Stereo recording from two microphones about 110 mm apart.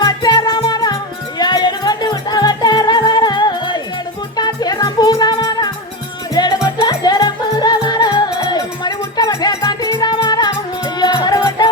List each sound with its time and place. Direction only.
0.0 s music: 40° left (ahead or behind)